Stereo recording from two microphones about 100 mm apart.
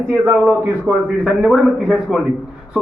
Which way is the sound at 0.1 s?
25° right (ahead or behind).